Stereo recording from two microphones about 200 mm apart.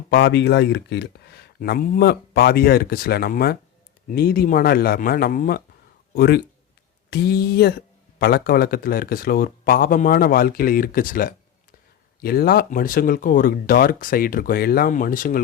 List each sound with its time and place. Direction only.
0.1 s speech: 55° left (ahead or behind)